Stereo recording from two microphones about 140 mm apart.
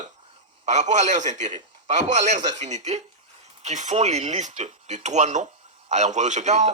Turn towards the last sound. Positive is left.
turn(degrees=-55)  # may be behind; listen again after turning